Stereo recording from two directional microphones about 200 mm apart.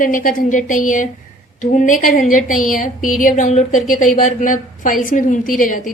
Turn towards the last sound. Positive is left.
turn(degrees=40)  # may be behind; listen again after turning